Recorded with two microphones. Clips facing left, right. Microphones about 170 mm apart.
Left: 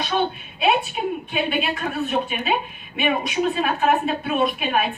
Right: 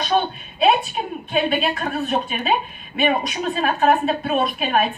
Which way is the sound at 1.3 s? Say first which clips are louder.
Right 3 dB; 40° right (ahead or behind).